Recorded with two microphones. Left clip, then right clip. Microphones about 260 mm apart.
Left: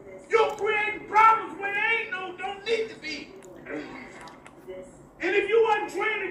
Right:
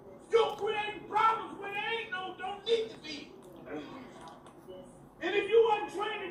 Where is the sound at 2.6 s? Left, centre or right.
Left.